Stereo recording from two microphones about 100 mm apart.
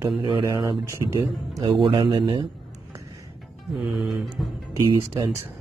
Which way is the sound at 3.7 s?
Centre (ahead or behind).